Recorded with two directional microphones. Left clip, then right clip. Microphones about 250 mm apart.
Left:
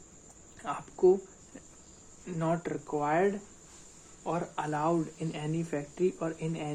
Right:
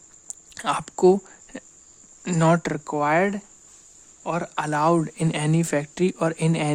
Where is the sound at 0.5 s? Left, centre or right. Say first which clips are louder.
Right 12 dB; right.